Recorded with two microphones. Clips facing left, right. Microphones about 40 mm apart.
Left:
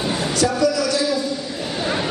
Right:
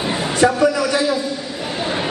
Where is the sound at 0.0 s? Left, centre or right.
Right.